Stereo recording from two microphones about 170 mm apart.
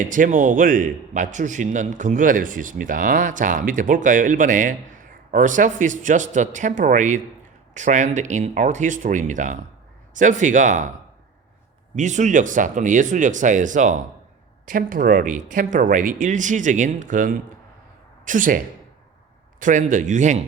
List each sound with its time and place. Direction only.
0.0 s a man's voice: 50° right (ahead or behind)
11.9 s a man's voice: 45° right (ahead or behind)